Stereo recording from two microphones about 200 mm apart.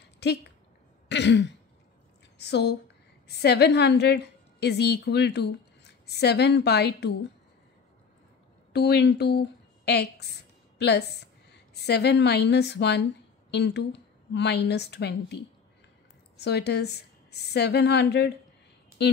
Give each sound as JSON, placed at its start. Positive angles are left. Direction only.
{"t": 0.0, "sound": "a sound", "side_deg": 55}
{"t": 1.0, "sound": "throat clearing", "side_deg": 60}
{"t": 2.3, "sound": "a woman's voice", "side_deg": 55}
{"t": 8.7, "sound": "a woman's voice", "side_deg": 55}
{"t": 16.3, "sound": "a woman's voice", "side_deg": 55}